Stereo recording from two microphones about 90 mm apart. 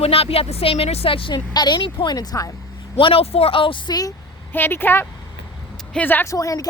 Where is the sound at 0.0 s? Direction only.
90° left.